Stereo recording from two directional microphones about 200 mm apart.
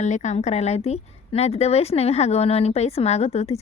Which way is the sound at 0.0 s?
35° left (ahead or behind).